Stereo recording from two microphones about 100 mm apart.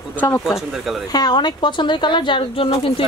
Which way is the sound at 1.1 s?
45° left (ahead or behind).